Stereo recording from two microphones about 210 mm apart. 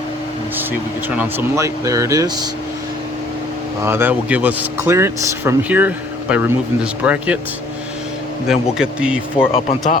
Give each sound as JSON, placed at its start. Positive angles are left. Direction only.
{"t": 0.5, "sound": "speech", "side_deg": -10}
{"t": 3.8, "sound": "speech", "side_deg": -10}
{"t": 8.4, "sound": "speech", "side_deg": -5}
{"t": 9.5, "sound": "speech", "side_deg": 30}